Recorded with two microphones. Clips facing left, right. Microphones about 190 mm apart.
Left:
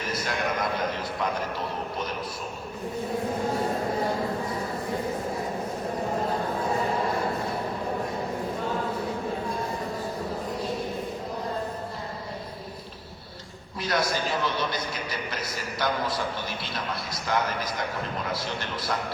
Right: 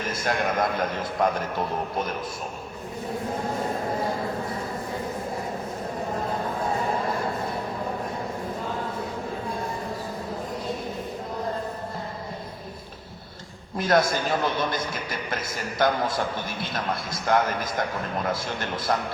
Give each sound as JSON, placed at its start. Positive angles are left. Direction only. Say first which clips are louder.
{"t": 0.0, "sound": "a man's voice", "louder": "right 3 dB", "side_deg": -50}
{"t": 13.7, "sound": "a man's voice", "louder": "right 5 dB", "side_deg": -50}
{"t": 18.9, "sound": "a man's voice", "louder": "right 5 dB", "side_deg": -50}